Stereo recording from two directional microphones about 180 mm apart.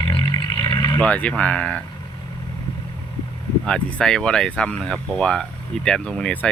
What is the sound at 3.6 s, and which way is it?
Speech, 5° left (ahead or behind).